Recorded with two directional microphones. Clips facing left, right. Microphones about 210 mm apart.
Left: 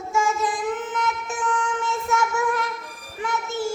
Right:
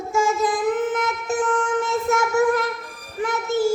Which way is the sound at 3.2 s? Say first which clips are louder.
Right 6 dB; 35° right (ahead or behind).